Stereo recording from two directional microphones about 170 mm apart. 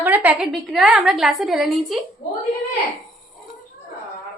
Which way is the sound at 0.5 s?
Centre (ahead or behind).